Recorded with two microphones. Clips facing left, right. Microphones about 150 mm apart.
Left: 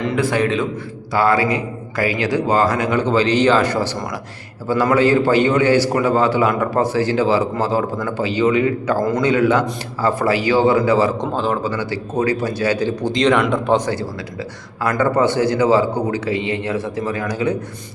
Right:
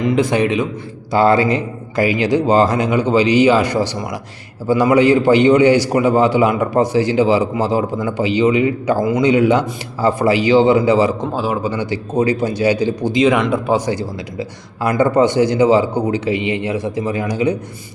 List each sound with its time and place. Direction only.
0.0 s a man's voice: 15° right (ahead or behind)
11.2 s a man's voice: 5° right (ahead or behind)